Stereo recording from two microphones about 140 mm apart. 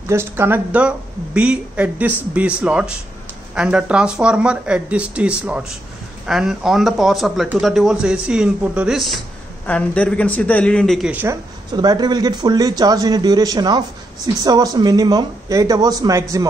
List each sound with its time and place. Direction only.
0.1 s a man's voice: 15° right (ahead or behind)
9.7 s a man's voice: 10° left (ahead or behind)
11.1 s speech: 10° right (ahead or behind)
11.7 s speech: 30° right (ahead or behind)